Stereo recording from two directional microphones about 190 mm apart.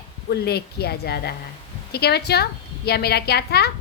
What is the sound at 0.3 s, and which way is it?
A woman's voice, 55° left (ahead or behind).